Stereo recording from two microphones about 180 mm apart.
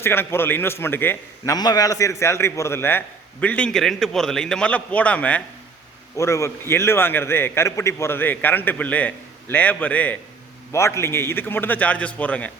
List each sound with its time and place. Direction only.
0.0 s a man's voice: 15° left (ahead or behind)